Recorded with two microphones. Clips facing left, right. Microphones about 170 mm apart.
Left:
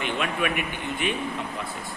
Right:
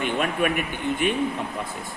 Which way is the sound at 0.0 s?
45° right (ahead or behind).